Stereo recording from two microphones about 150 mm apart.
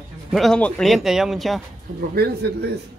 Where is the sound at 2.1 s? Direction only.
90° right.